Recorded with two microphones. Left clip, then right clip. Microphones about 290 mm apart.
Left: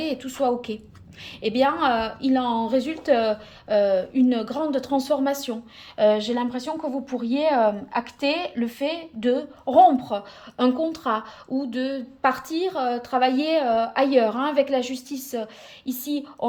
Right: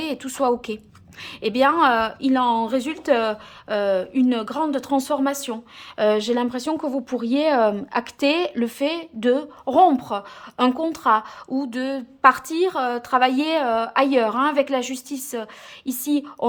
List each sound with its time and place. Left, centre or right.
0.0 s a woman's voice: centre